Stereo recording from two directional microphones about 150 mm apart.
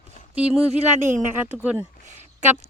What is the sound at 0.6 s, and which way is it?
Speech, 55° right (ahead or behind).